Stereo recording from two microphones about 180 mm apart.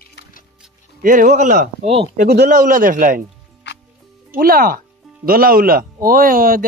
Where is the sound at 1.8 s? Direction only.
35° right (ahead or behind).